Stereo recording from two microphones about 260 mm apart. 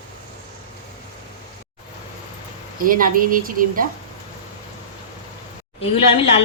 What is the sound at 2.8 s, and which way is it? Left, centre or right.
Speech, right.